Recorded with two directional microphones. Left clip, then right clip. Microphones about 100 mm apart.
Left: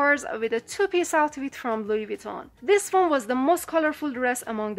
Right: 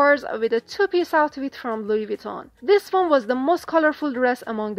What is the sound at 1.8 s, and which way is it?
Speech, 35° right (ahead or behind).